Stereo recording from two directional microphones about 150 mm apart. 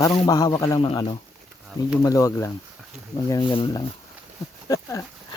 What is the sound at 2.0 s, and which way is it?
Speech, 20° left (ahead or behind).